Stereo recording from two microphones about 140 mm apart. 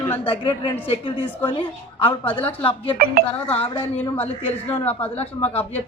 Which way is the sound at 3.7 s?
15° left (ahead or behind).